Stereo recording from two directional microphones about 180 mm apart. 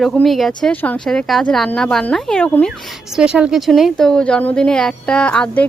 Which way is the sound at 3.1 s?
5° right (ahead or behind).